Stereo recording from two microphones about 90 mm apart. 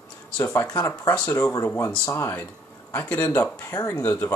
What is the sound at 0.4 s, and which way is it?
Speech, 35° left (ahead or behind).